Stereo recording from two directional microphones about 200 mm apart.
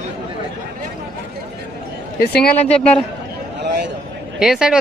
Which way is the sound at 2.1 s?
50° left (ahead or behind).